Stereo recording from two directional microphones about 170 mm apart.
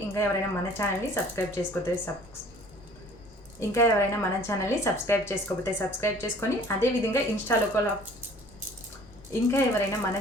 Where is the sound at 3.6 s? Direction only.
15° left (ahead or behind).